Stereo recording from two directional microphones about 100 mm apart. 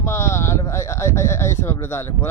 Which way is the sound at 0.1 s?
30° left (ahead or behind).